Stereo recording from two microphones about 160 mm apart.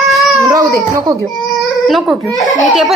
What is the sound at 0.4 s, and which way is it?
Speech, 20° right (ahead or behind).